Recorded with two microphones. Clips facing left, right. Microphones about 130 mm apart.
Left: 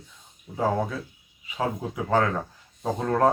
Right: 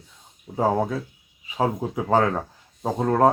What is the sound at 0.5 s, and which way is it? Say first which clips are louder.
Speech: right 3 dB; 35° right (ahead or behind).